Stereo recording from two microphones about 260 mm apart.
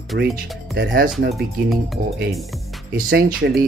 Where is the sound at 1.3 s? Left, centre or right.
Centre.